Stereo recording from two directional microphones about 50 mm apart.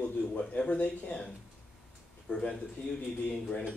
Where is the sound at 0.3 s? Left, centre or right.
Left.